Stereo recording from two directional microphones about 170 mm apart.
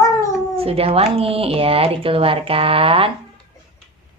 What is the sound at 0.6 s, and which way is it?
Speech, 35° right (ahead or behind).